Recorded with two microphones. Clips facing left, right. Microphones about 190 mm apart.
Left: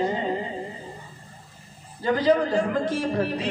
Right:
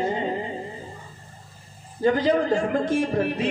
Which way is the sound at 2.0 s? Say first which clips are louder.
Right 1 dB; 50° right (ahead or behind).